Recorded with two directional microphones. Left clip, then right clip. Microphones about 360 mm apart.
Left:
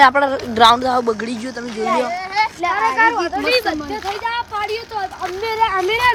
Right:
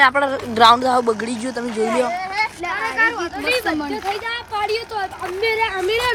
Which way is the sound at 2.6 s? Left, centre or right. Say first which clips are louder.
Left 5 dB; left.